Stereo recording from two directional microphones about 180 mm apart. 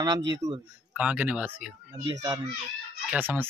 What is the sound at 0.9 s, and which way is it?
Speech, 5° right (ahead or behind).